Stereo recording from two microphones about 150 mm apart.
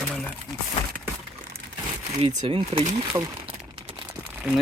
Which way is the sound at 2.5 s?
35° right (ahead or behind).